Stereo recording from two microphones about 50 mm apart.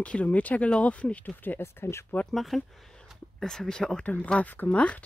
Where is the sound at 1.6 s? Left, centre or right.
Left.